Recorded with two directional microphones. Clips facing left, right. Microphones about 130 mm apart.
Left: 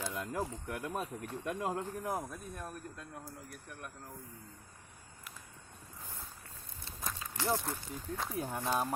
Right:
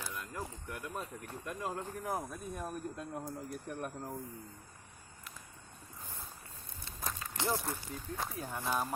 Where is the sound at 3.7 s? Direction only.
40° right (ahead or behind).